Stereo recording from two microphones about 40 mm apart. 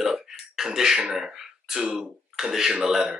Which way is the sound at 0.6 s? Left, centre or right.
Centre.